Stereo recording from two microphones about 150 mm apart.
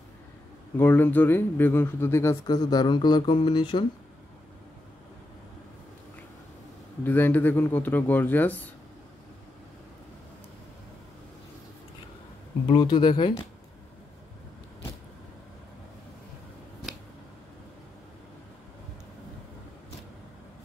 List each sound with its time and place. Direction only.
0.7 s speech: 15° left (ahead or behind); by 3.8 s 30° left (ahead or behind)
7.1 s speech: 10° left (ahead or behind)
12.6 s speech: 30° left (ahead or behind)